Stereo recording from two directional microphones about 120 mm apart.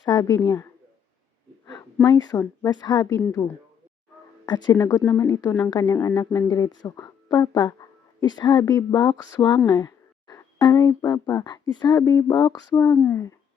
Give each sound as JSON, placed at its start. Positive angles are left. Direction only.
{"t": 0.0, "sound": "speech", "side_deg": 35}
{"t": 2.0, "sound": "speech", "side_deg": 35}